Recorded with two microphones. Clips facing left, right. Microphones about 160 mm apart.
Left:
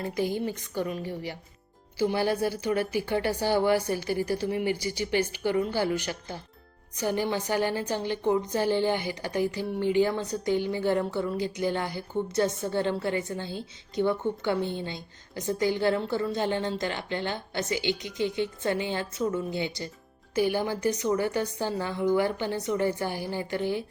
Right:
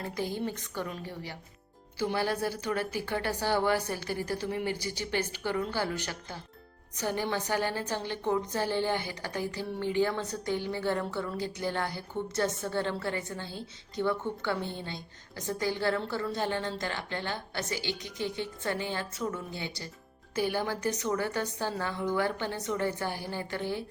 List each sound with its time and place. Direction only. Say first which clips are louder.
0.1 s a woman's voice: left 4 dB; 10° left (ahead or behind)
2.0 s a woman's voice: left 4 dB; 10° left (ahead or behind)